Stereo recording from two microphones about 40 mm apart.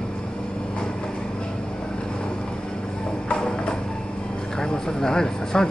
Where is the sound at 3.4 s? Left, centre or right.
Left.